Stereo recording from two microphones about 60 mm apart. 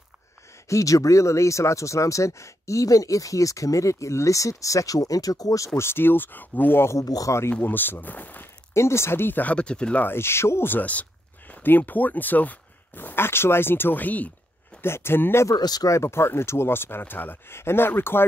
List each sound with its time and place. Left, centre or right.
0.7 s speech: left
5.8 s speech: left
6.8 s speech: left
7.1 s speech: left
7.6 s speech: left
8.7 s speech: left; by 10.0 s centre
10.0 s speech: left
14.8 s speech: left
15.4 s speech: left
16.0 s speech: left